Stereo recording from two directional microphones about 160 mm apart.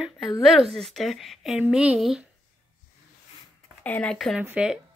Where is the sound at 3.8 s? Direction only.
10° left (ahead or behind).